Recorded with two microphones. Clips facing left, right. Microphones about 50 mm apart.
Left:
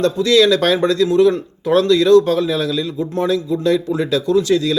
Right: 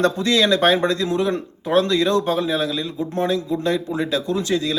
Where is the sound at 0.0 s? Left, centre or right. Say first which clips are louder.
Left 5 dB; right.